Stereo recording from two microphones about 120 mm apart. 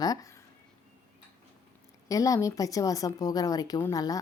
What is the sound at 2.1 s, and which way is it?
A woman's voice, 30° left (ahead or behind).